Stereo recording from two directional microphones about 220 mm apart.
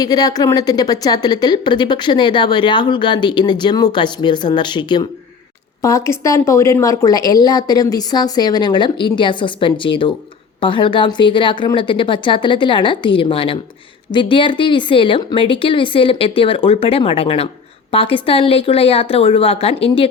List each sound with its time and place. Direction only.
0.0 s a woman's voice: 15° left (ahead or behind)